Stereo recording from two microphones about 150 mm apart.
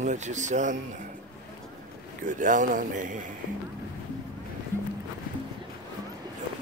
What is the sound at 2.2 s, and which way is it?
Speech, 60° right (ahead or behind).